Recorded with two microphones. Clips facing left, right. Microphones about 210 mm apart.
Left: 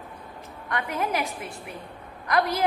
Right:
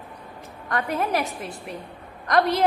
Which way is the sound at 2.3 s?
30° right (ahead or behind).